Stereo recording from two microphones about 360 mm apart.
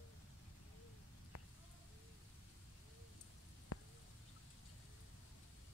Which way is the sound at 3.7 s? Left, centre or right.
Left.